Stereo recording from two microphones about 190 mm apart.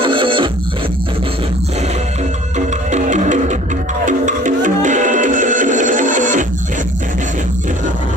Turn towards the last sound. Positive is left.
turn(degrees=-45)  # may be behind; listen again after turning